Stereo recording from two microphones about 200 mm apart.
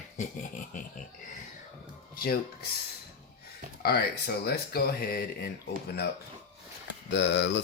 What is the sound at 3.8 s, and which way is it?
Speech, 50° left (ahead or behind).